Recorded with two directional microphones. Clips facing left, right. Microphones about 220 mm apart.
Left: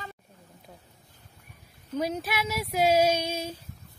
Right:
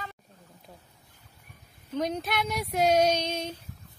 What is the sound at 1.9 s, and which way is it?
Speech, 5° left (ahead or behind).